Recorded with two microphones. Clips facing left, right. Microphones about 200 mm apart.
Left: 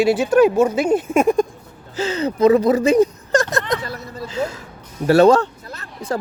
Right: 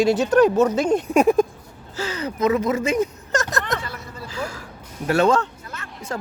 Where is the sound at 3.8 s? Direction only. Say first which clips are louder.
Left 5 dB; 40° left (ahead or behind).